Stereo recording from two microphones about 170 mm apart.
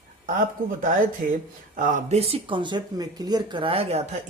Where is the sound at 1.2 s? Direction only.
55° right (ahead or behind); by 4.0 s 35° right (ahead or behind).